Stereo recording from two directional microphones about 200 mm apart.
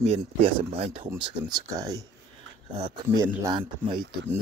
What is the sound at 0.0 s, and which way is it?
Speech, 30° right (ahead or behind).